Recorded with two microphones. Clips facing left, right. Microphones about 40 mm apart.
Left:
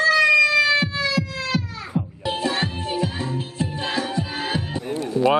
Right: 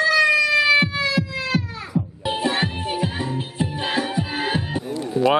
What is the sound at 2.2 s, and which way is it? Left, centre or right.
Music, right.